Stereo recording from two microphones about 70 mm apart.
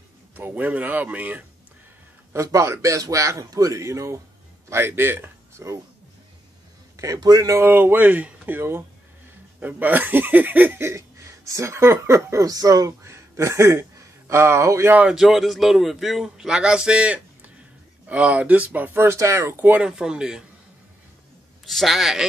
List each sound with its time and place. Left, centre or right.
0.4 s speech: right
2.3 s speech: right
5.6 s speech: right
7.2 s speech: right
7.6 s speech: right
10.8 s speech: right
12.4 s speech: right
15.1 s speech: centre; by 18.9 s right
18.9 s speech: right
19.8 s speech: centre
21.6 s speech: centre